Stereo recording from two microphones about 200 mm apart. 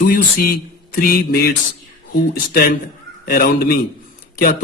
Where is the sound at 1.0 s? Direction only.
50° left (ahead or behind).